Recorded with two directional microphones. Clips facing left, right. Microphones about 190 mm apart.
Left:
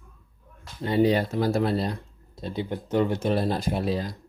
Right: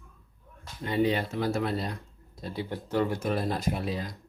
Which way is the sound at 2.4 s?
20° left (ahead or behind).